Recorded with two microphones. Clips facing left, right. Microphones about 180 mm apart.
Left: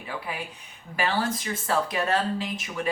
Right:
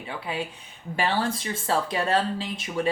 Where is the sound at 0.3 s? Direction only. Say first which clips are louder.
Right 4 dB; 25° right (ahead or behind).